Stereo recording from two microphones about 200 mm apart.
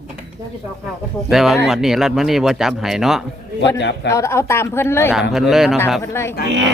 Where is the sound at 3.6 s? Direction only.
60° left (ahead or behind).